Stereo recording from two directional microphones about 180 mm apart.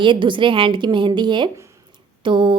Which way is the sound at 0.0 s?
25° right (ahead or behind).